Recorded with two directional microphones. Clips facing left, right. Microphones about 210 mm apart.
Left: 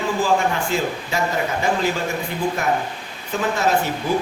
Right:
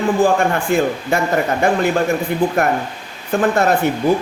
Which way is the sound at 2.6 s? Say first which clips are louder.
Right 4 dB; 60° right (ahead or behind).